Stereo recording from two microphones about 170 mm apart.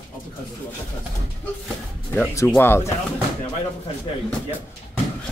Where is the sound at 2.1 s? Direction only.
10° left (ahead or behind).